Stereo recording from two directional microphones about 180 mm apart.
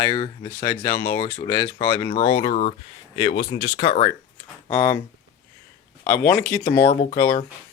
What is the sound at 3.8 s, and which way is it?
Speech, 30° left (ahead or behind).